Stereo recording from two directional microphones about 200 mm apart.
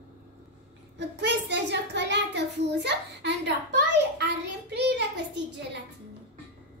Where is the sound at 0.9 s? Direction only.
60° right (ahead or behind).